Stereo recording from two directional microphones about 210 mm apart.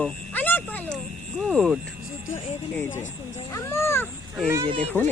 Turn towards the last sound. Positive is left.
turn(degrees=10)  # may be behind; listen again after turning